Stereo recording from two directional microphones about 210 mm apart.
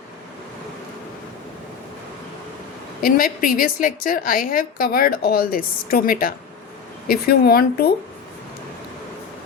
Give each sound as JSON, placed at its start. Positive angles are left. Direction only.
{"t": 3.0, "sound": "a woman's voice", "side_deg": 45}